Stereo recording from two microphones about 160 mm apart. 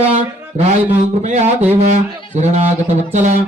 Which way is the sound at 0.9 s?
45° right (ahead or behind).